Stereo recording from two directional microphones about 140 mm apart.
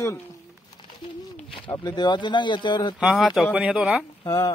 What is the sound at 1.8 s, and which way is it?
Speech, 30° left (ahead or behind).